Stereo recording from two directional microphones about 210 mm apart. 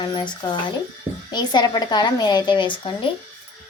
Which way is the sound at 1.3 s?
20° left (ahead or behind).